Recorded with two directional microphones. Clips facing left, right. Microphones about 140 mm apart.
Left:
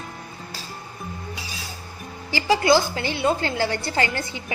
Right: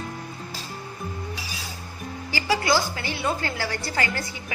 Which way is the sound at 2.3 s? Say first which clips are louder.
Left 5 dB; 25° left (ahead or behind).